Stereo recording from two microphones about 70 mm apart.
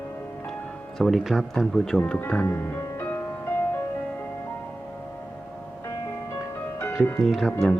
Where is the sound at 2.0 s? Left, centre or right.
Left.